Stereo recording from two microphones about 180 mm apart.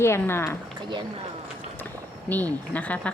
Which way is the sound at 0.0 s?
15° left (ahead or behind).